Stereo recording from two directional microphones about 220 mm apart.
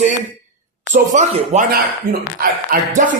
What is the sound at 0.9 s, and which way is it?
Speech, 35° right (ahead or behind).